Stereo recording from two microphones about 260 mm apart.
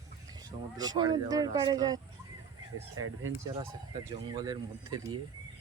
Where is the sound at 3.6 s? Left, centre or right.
Centre.